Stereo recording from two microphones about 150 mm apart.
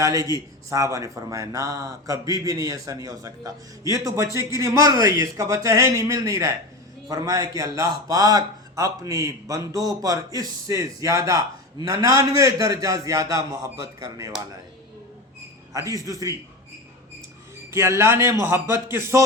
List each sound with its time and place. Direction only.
0.0 s a man's voice: 20° right (ahead or behind)
15.7 s a man's voice: 20° right (ahead or behind)
17.7 s a man's voice: 20° right (ahead or behind)